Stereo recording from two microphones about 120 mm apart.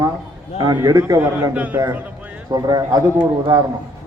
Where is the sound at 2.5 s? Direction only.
30° right (ahead or behind).